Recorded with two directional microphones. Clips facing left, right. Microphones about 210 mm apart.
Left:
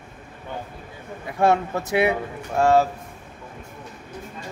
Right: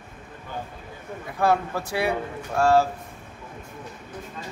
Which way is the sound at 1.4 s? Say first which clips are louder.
Left 3 dB; 25° left (ahead or behind).